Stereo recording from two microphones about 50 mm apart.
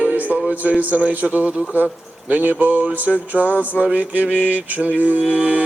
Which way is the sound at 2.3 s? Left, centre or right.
Right.